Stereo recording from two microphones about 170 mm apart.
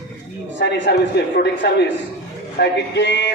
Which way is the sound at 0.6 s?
85° left.